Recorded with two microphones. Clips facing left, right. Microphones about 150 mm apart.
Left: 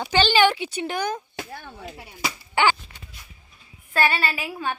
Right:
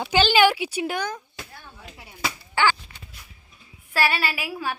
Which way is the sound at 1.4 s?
70° left (ahead or behind).